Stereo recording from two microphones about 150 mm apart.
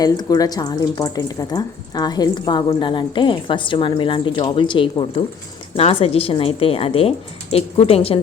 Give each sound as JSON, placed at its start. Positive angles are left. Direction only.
{"t": 0.0, "sound": "a woman's voice", "side_deg": 25}